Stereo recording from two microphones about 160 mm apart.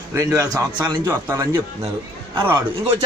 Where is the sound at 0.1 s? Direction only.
20° right (ahead or behind).